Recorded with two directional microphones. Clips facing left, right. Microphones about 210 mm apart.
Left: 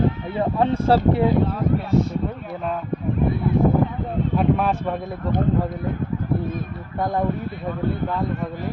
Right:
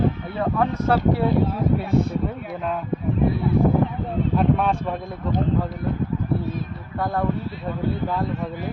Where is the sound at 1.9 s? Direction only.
55° right (ahead or behind).